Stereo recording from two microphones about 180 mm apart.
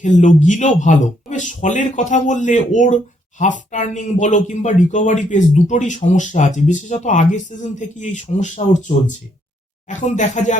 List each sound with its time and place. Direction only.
0.0 s speech: 40° left (ahead or behind)